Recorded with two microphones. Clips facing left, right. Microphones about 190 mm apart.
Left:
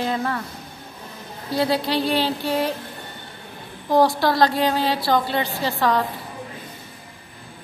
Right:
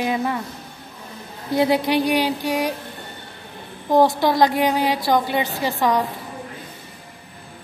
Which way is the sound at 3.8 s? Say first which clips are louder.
Right 1 dB; 20° right (ahead or behind).